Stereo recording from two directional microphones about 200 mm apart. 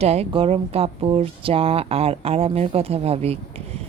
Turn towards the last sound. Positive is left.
turn(degrees=-30)  # may be behind; listen again after turning